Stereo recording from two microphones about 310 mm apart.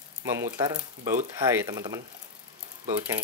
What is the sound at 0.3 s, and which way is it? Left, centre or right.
Speech, centre.